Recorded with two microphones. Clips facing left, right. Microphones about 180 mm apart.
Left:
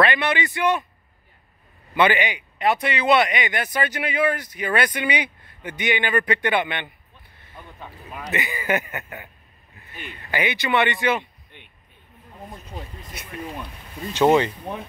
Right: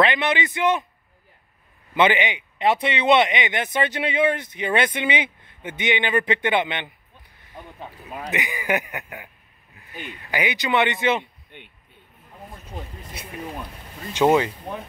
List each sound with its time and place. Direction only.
0.0 s speech: 20° right (ahead or behind)
2.0 s speech: 20° right (ahead or behind)
8.0 s speech: 20° right (ahead or behind)
10.3 s speech: 15° right (ahead or behind)
14.1 s speech: 10° right (ahead or behind)